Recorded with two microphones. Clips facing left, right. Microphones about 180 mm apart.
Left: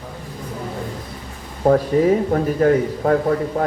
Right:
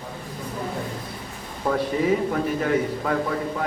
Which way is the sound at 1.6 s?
40° left (ahead or behind).